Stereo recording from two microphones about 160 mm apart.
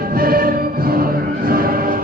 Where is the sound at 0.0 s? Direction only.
65° right (ahead or behind).